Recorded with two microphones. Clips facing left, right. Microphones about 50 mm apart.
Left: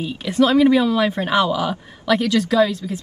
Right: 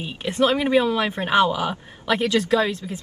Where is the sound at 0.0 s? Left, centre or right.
Right.